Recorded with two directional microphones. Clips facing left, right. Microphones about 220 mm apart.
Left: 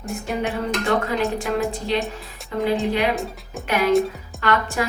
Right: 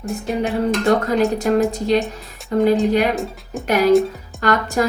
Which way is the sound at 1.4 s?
40° right (ahead or behind).